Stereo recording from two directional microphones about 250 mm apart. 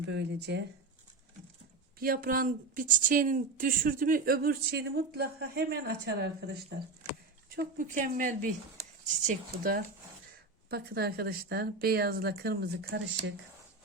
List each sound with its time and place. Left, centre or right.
0.0 s speech: right
2.0 s speech: right